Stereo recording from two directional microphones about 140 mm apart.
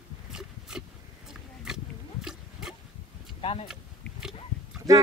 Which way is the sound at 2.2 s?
5° right (ahead or behind).